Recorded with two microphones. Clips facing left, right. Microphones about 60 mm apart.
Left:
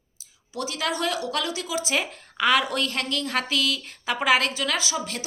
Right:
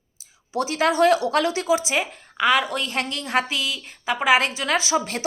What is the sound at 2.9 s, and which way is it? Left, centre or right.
A woman's voice, right.